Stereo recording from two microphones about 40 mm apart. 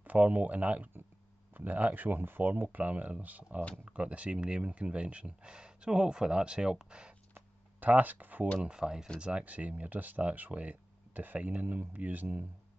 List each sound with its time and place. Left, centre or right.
0.0 s speech: right
7.8 s speech: right
8.6 s speech: centre
9.2 s speech: right